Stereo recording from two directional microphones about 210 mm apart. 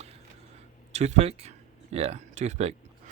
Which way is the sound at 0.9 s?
30° right (ahead or behind).